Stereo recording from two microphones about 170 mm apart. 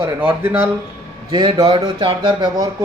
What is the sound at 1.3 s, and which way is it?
A man's voice, 25° right (ahead or behind).